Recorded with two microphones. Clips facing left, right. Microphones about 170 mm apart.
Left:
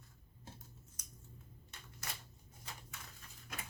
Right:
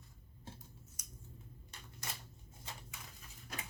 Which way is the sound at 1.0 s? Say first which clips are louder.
Right 1 dB; 10° right (ahead or behind).